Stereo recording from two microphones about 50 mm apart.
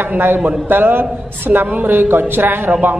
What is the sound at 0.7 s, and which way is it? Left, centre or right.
Speech, right.